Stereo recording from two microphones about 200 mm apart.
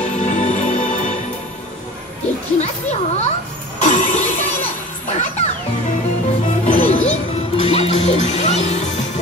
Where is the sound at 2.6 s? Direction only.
35° left (ahead or behind).